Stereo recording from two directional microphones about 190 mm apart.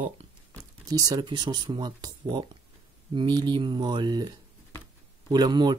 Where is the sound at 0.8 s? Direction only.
20° right (ahead or behind).